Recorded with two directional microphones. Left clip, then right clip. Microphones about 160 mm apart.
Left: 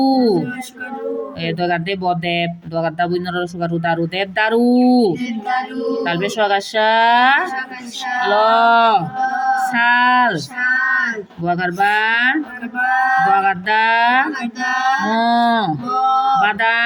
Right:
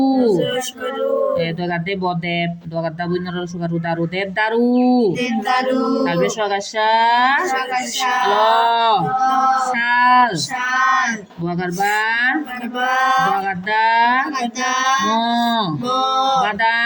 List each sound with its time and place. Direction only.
1.4 s speech: 20° left (ahead or behind)
5.2 s chant: 55° right (ahead or behind)
6.1 s speech: 20° left (ahead or behind)
10.7 s child singing: 55° right (ahead or behind)
11.4 s speech: 20° left (ahead or behind)
12.8 s speech: 55° right (ahead or behind)
13.3 s speech: 20° left (ahead or behind)
14.6 s speech: 55° right (ahead or behind)
15.1 s speech: 20° left (ahead or behind)
15.9 s male singing: 55° right (ahead or behind)
16.4 s speech: 20° left (ahead or behind)